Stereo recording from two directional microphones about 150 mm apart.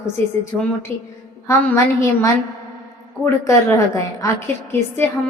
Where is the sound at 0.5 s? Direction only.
15° left (ahead or behind).